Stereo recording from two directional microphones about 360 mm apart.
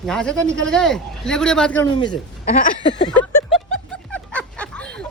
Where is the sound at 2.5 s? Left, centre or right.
Left.